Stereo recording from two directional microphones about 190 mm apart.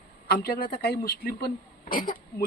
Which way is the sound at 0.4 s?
50° left (ahead or behind).